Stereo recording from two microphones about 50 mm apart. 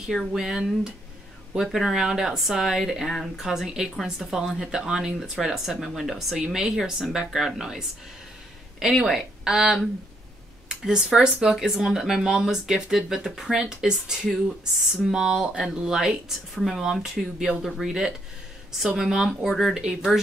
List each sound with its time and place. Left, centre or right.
0.1 s speech: centre
8.9 s speech: centre
9.4 s speech: centre
11.6 s speech: centre